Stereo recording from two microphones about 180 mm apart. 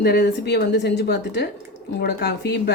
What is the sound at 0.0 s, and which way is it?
A woman's voice, 60° left (ahead or behind).